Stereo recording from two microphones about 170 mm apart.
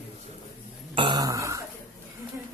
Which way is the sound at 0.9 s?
30° right (ahead or behind).